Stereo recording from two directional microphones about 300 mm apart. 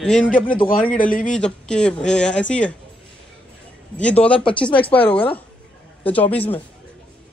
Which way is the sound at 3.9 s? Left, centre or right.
Centre.